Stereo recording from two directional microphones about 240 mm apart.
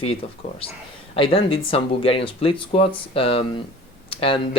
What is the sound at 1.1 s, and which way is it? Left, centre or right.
Speech, left.